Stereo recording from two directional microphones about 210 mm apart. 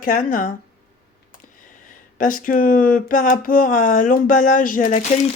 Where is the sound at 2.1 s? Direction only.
40° left (ahead or behind).